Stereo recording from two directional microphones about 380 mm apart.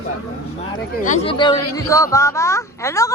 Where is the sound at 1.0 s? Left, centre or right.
Centre.